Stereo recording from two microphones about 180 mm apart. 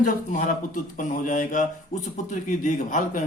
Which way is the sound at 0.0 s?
45° left (ahead or behind).